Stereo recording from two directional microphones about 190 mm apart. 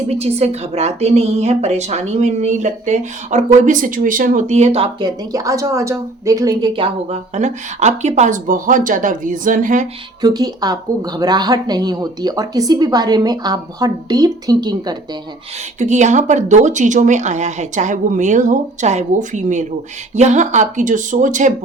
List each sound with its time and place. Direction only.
0.1 s a woman's voice: 35° right (ahead or behind)
4.9 s speech: 20° right (ahead or behind)
7.3 s speech: 40° right (ahead or behind)
10.2 s speech: 20° right (ahead or behind)
15.8 s a woman's voice: 40° right (ahead or behind)